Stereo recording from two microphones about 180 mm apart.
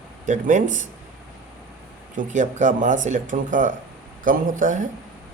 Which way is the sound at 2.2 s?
40° right (ahead or behind).